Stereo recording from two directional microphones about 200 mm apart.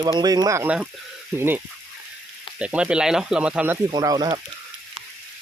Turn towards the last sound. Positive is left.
turn(degrees=-20)  # may be behind; listen again after turning